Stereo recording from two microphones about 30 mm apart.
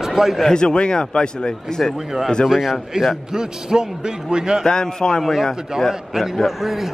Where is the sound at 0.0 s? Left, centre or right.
Centre.